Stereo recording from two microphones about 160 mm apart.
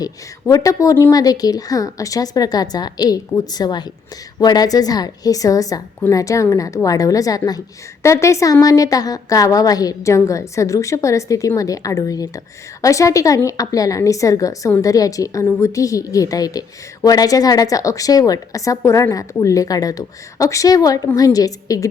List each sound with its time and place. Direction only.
0.0 s a woman's voice: 20° left (ahead or behind)